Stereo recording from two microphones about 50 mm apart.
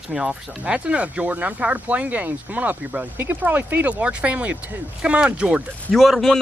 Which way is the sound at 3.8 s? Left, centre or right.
Right.